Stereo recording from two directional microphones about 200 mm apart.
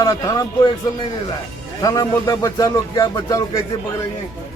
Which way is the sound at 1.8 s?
20° left (ahead or behind).